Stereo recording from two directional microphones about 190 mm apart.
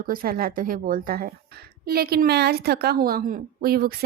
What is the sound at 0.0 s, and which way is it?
A woman's voice, 50° right (ahead or behind).